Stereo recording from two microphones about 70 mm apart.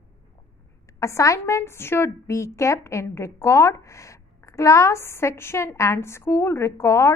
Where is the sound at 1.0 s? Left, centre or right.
Left.